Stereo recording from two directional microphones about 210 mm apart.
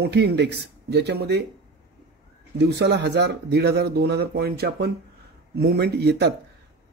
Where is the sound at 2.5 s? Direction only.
55° right (ahead or behind).